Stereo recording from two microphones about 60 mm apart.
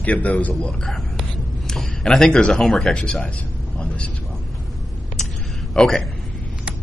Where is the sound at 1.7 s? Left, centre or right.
Centre.